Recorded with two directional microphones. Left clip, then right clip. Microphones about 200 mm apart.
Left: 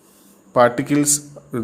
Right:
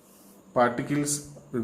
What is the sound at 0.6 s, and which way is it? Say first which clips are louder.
Speech: left 9 dB; 55° left (ahead or behind).